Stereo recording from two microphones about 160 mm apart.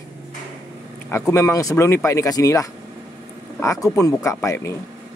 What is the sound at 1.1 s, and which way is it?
Speech, 15° left (ahead or behind).